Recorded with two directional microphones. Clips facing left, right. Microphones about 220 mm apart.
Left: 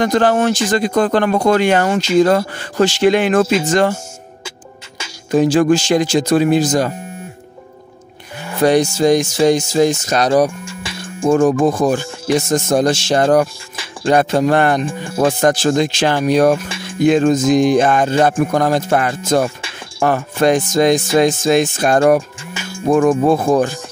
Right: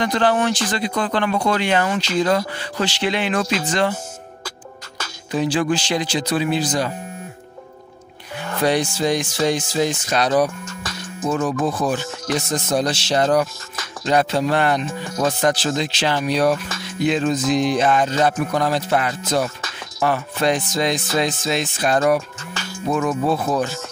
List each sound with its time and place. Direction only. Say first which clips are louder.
0.0 s speech: left 5 dB; 45° left (ahead or behind)
5.3 s speech: left 8 dB; 45° left (ahead or behind)
8.6 s speech: left 7 dB; 45° left (ahead or behind)
10.8 s music: left 4 dB; 10° left (ahead or behind)
11.2 s speech: left 8 dB; 50° left (ahead or behind)
22.5 s music: left 2 dB; 10° left (ahead or behind)
22.8 s speech: left 8 dB; 50° left (ahead or behind)